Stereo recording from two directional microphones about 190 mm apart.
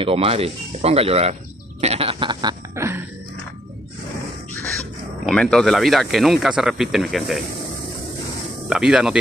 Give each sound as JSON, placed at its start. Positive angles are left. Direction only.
{"t": 0.0, "sound": "speech", "side_deg": -30}
{"t": 1.8, "sound": "a sound", "side_deg": -30}
{"t": 2.7, "sound": "speech", "side_deg": -15}
{"t": 5.2, "sound": "speech", "side_deg": 5}
{"t": 8.6, "sound": "speech", "side_deg": -5}